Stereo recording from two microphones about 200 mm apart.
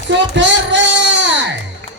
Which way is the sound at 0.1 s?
65° right (ahead or behind).